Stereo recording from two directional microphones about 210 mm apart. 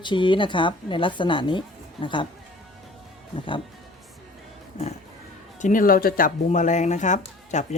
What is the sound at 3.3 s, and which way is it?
Speech, 25° left (ahead or behind).